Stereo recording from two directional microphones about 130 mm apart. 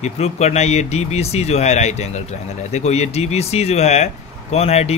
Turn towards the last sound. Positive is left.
turn(degrees=55)  # may be behind; listen again after turning